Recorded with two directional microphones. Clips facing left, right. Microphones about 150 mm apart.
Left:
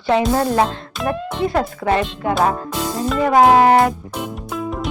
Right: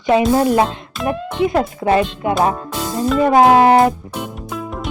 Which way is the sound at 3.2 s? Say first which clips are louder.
Right 1 dB; 25° right (ahead or behind).